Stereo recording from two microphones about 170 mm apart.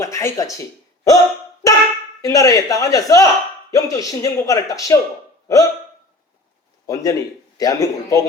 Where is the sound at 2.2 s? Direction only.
20° left (ahead or behind).